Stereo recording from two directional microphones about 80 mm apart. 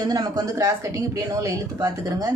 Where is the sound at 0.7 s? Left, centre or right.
Right.